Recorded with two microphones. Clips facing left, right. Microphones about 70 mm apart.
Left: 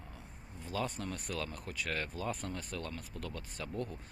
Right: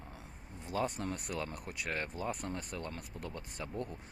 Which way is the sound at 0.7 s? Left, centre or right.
Right.